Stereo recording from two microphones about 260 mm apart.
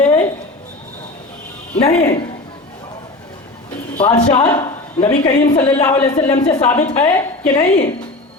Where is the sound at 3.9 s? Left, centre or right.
Left.